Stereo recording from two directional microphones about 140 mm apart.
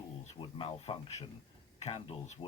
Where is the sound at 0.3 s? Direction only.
40° left (ahead or behind).